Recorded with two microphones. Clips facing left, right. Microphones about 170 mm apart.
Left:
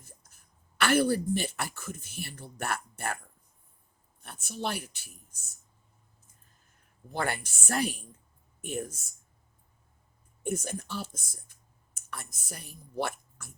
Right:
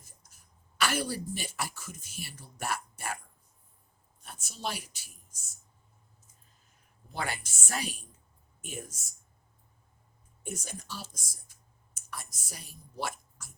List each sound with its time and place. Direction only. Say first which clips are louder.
0.8 s a woman's voice: left 7 dB; 55° left (ahead or behind)
4.2 s a woman's voice: left 4 dB; 60° left (ahead or behind)
7.2 s a woman's voice: left 4 dB; 60° left (ahead or behind)
10.4 s a woman's voice: left 8 dB; 55° left (ahead or behind)